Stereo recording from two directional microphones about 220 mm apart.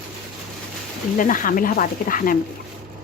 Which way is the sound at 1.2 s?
40° left (ahead or behind).